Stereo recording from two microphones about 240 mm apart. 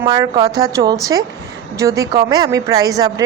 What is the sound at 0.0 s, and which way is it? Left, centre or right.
A woman's voice, centre.